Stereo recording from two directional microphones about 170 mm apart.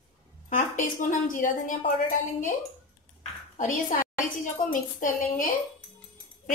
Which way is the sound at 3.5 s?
50° left (ahead or behind).